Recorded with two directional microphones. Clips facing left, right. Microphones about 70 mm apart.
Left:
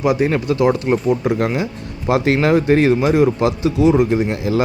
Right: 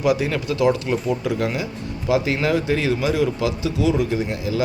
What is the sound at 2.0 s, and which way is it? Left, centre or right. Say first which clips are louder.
Speech: left 5 dB; left.